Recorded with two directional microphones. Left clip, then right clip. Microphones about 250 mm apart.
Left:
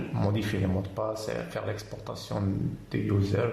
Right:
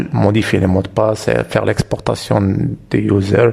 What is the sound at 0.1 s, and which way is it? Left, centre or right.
Speech, right.